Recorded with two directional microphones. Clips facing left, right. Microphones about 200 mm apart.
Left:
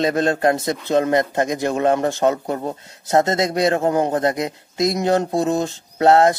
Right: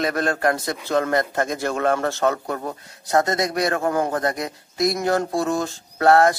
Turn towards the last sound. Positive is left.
turn(degrees=20)  # may be behind; listen again after turning